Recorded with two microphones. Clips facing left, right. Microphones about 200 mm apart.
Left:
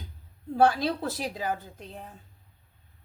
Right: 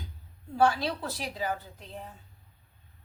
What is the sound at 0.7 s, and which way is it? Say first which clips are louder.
Speech: left 3 dB; 50° left (ahead or behind).